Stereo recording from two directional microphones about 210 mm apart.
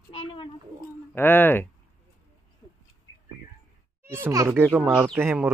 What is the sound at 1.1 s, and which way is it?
Speech, 10° left (ahead or behind).